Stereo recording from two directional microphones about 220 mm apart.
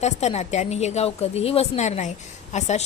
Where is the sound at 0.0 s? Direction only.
30° left (ahead or behind).